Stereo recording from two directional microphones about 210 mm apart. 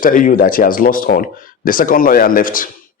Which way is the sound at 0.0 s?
40° left (ahead or behind).